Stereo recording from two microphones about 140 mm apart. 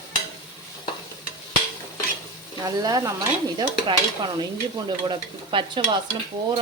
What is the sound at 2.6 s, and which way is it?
Stir, 25° right (ahead or behind).